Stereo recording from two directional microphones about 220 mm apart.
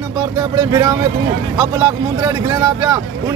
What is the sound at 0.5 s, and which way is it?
Speech, 15° right (ahead or behind).